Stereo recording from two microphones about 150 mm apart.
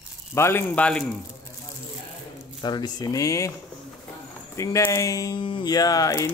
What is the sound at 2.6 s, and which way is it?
Speech, 30° left (ahead or behind).